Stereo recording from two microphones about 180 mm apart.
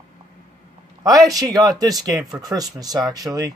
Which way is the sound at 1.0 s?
20° right (ahead or behind).